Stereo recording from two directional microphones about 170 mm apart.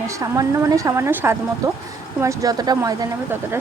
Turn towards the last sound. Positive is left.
turn(degrees=-20)  # may be behind; listen again after turning